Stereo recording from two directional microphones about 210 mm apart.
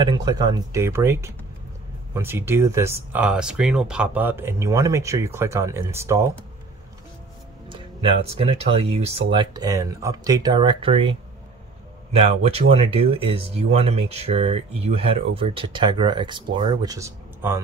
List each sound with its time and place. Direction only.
0.0 s speech: 20° right (ahead or behind)
7.7 s speech: 25° right (ahead or behind)